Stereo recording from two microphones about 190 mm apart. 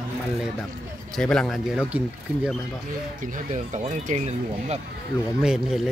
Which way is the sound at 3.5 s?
40° right (ahead or behind).